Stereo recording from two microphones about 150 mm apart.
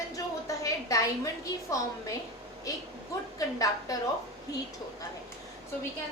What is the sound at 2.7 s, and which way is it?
A woman's voice, 20° left (ahead or behind).